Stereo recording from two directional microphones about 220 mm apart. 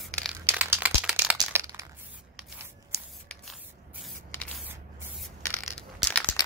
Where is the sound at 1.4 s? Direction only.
15° right (ahead or behind).